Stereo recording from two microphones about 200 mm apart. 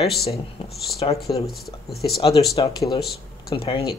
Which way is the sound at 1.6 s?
50° left (ahead or behind).